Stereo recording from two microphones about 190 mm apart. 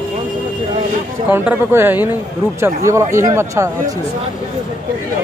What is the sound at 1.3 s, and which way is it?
Speech, 10° right (ahead or behind).